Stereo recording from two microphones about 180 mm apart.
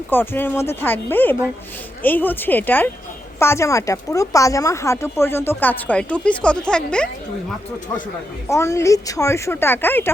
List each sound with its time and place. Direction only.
0.1 s speech: 10° left (ahead or behind)
8.4 s speech: 15° left (ahead or behind)